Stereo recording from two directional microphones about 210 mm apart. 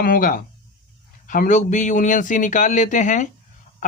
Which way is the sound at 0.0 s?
40° left (ahead or behind).